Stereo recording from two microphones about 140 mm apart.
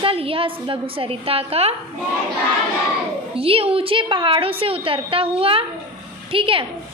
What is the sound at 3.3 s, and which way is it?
A woman's voice, 45° right (ahead or behind).